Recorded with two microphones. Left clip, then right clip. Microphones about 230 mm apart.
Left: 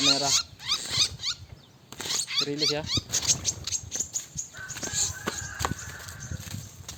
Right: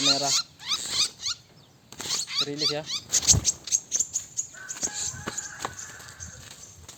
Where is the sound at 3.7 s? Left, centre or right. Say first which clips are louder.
Right 5 dB; right.